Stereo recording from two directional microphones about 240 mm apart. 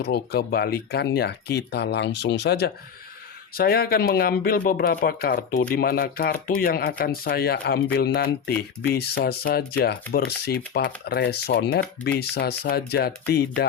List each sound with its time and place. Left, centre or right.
0.0 s speech: left